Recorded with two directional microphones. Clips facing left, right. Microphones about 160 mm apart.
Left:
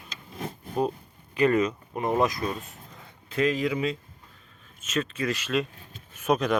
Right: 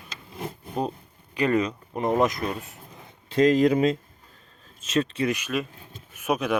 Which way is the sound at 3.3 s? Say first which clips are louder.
Right 7 dB; 40° right (ahead or behind).